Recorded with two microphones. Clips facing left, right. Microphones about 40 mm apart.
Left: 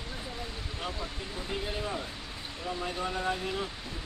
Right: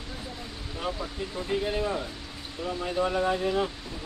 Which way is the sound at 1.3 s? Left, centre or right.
Right.